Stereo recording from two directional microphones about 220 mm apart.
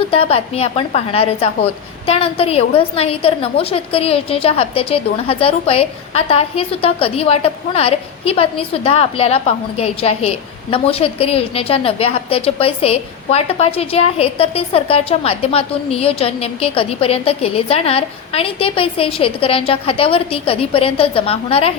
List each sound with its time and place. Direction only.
0.1 s a woman's voice: 25° left (ahead or behind)